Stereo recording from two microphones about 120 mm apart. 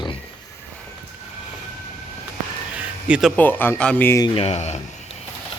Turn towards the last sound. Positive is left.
turn(degrees=65)  # may be behind; listen again after turning